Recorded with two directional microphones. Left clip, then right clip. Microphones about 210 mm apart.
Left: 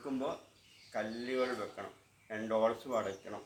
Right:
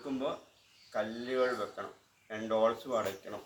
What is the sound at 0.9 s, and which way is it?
Speech, centre (ahead or behind).